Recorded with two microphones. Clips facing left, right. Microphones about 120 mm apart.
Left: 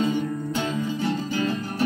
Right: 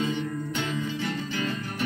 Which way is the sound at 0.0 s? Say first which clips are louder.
Left 4 dB; 35° left (ahead or behind).